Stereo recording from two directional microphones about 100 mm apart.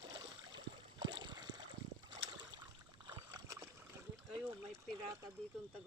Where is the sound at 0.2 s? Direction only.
50° right (ahead or behind).